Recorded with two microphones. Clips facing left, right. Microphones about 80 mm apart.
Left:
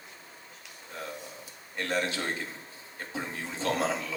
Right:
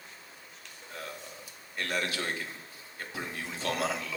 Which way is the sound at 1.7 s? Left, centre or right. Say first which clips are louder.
Left 3 dB; left.